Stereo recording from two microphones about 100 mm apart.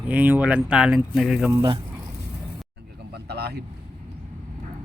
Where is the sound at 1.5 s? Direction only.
40° right (ahead or behind).